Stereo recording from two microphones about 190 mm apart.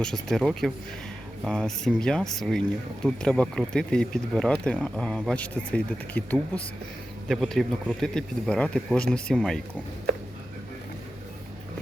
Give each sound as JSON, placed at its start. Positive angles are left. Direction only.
{"t": 0.0, "sound": "speech", "side_deg": 0}